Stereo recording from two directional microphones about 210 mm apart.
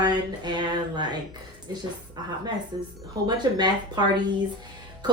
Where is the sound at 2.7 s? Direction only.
20° right (ahead or behind).